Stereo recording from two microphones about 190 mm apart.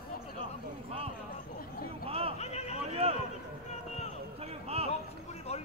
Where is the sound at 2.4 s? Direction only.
35° left (ahead or behind).